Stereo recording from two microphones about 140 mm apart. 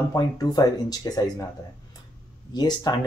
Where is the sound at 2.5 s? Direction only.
30° left (ahead or behind).